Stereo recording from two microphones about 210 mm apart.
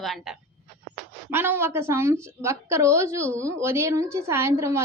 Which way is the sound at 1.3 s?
10° right (ahead or behind).